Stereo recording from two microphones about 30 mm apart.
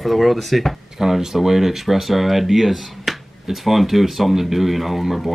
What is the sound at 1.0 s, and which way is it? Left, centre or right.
Speech, centre.